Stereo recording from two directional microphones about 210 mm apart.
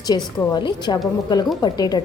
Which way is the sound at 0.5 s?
20° left (ahead or behind).